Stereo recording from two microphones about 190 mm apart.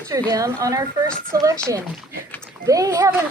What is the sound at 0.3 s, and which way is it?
A woman's voice, 15° right (ahead or behind).